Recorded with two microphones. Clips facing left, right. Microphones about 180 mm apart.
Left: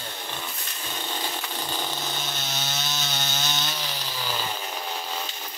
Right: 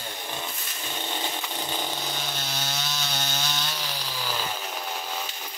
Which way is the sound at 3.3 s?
5° left (ahead or behind).